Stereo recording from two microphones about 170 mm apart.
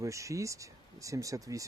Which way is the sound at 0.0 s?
20° right (ahead or behind).